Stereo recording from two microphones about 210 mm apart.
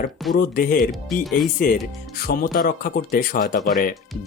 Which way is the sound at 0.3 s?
45° left (ahead or behind).